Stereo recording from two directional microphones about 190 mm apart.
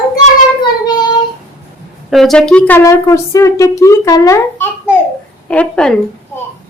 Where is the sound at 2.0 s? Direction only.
Centre (ahead or behind).